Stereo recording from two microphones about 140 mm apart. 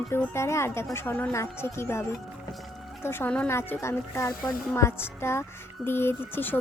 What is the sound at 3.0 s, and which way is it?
Speech, 15° left (ahead or behind).